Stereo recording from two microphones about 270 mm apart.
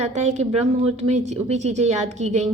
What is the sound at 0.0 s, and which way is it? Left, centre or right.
Speech, right.